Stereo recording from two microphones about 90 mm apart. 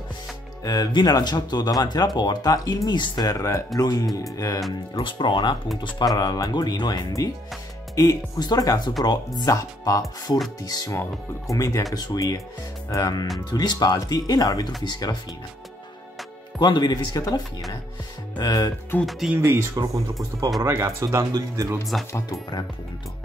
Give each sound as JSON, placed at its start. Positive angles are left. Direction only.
{"t": 0.7, "sound": "speech", "side_deg": 45}
{"t": 5.0, "sound": "speech", "side_deg": 60}
{"t": 5.9, "sound": "speech", "side_deg": 45}
{"t": 16.5, "sound": "speech", "side_deg": 55}
{"t": 18.4, "sound": "speech", "side_deg": 45}
{"t": 19.0, "sound": "speech", "side_deg": 0}
{"t": 19.3, "sound": "speech", "side_deg": -30}
{"t": 21.9, "sound": "speech", "side_deg": 5}